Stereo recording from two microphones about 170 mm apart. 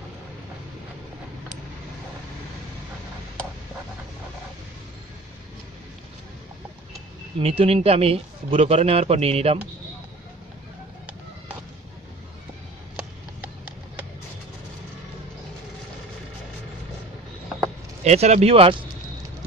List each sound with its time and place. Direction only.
7.3 s speech: 35° right (ahead or behind)
18.0 s speech: 40° right (ahead or behind)